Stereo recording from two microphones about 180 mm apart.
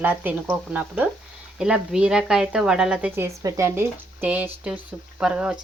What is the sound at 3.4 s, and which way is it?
Speech, 15° right (ahead or behind).